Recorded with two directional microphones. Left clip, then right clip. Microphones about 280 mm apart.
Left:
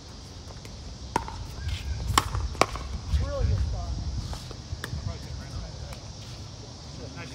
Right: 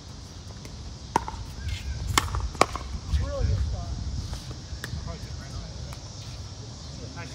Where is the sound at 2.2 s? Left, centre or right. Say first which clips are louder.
Left 1 dB; centre.